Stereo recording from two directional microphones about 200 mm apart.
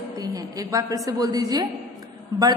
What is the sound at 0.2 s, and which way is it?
A woman's voice, 20° right (ahead or behind).